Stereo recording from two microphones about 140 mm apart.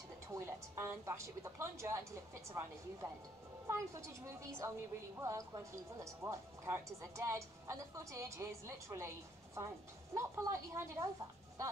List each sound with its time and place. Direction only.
0.3 s a woman's voice: 20° right (ahead or behind)
10.1 s a woman's voice: 20° right (ahead or behind)